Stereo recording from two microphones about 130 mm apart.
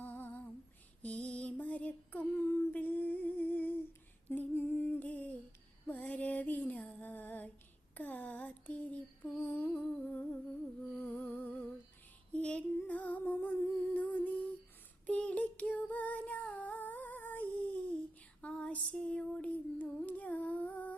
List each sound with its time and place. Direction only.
0.0 s humming: 15° left (ahead or behind)
1.0 s a sound: 10° left (ahead or behind)
4.3 s humming: 15° left (ahead or behind)
5.9 s female singing: 10° left (ahead or behind)
7.9 s a sound: 15° left (ahead or behind)
10.9 s music: 15° left (ahead or behind)
12.3 s humming: 10° left (ahead or behind)
15.0 s female singing: 10° left (ahead or behind)